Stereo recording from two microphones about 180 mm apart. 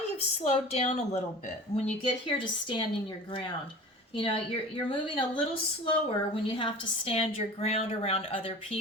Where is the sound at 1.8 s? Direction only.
30° left (ahead or behind).